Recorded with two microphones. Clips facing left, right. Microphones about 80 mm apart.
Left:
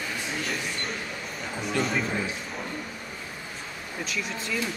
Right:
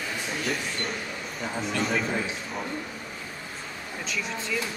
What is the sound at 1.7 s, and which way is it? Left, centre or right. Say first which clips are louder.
Speech: left 1 dB; centre.